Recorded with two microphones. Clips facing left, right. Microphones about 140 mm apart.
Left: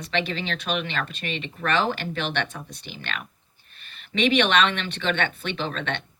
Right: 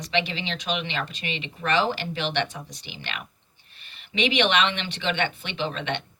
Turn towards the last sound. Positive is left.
turn(degrees=-15)  # may be behind; listen again after turning